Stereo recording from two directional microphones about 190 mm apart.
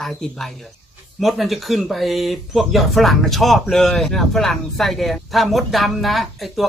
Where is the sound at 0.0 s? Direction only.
Centre (ahead or behind).